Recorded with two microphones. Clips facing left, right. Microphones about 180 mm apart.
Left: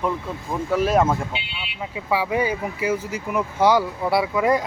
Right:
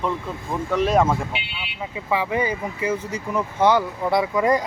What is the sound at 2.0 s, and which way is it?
Speech, 10° left (ahead or behind).